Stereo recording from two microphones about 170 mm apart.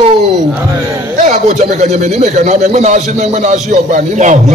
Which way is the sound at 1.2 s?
45° right (ahead or behind).